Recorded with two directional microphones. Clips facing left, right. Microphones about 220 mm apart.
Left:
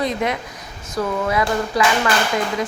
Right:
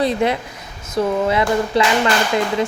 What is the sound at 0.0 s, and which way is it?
A woman's voice, 30° right (ahead or behind).